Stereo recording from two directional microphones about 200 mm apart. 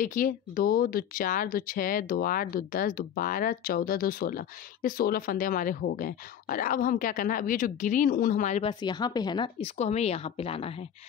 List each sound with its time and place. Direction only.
0.0 s speech: 40° left (ahead or behind)
8.8 s speech: 20° left (ahead or behind)